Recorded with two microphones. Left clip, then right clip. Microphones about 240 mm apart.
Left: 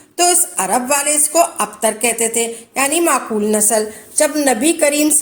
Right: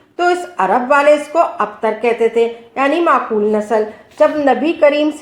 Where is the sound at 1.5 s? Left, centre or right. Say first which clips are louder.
Right 1 dB; left.